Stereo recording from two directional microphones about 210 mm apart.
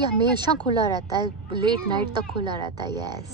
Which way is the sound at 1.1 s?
20° right (ahead or behind).